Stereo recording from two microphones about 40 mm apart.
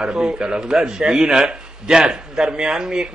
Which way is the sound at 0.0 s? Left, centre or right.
Centre.